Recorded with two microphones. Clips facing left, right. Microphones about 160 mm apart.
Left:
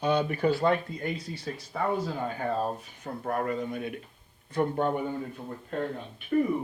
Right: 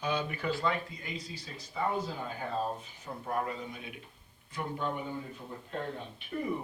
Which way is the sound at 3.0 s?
60° left (ahead or behind).